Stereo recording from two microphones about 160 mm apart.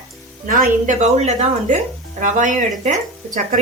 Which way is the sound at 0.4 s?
55° right (ahead or behind).